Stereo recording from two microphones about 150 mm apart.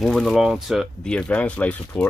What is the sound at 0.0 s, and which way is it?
Speech, centre (ahead or behind).